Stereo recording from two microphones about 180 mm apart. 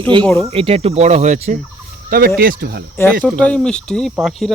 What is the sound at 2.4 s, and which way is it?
Speech, 55° right (ahead or behind).